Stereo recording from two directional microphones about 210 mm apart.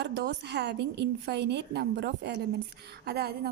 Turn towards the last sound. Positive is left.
turn(degrees=-50)  # may be behind; listen again after turning